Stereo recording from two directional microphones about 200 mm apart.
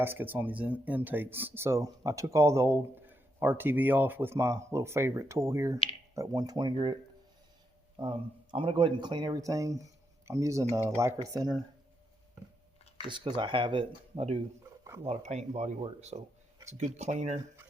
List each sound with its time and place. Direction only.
0.0 s speech: 10° right (ahead or behind)
7.9 s speech: 25° right (ahead or behind)
13.1 s speech: 25° right (ahead or behind)